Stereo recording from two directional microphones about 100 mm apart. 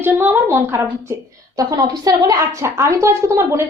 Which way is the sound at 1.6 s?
35° right (ahead or behind).